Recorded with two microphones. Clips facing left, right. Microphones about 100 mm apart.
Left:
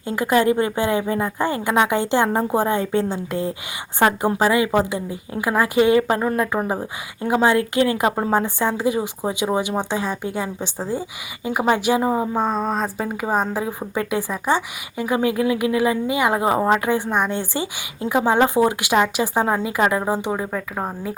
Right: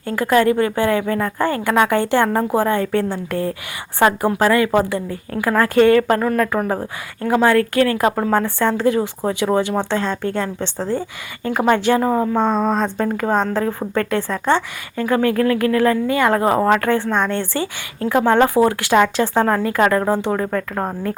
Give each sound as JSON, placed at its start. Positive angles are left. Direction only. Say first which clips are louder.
{"t": 0.0, "sound": "a woman's voice", "louder": "right 2 dB", "side_deg": 15}